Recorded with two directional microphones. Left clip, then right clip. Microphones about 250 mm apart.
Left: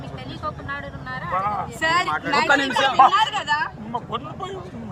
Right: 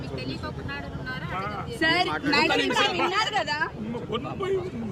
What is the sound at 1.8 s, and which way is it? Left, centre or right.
Speech, centre.